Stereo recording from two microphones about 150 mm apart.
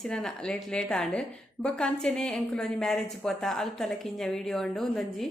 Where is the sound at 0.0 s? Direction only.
5° left (ahead or behind).